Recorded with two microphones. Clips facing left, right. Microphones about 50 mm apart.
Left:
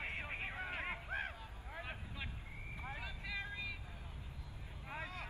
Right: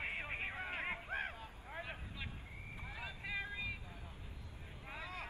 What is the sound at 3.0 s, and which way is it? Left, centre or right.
Vehicle, right.